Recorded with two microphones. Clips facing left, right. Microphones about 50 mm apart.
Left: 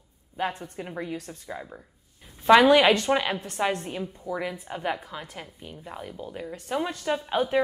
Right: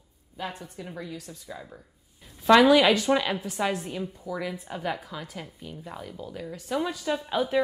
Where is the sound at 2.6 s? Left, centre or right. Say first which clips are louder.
Left 1 dB; left.